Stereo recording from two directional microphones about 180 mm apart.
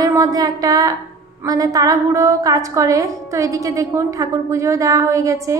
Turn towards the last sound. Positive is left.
turn(degrees=-15)  # may be behind; listen again after turning